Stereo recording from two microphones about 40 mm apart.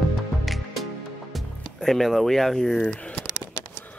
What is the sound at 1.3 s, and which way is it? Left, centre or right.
Speech, centre.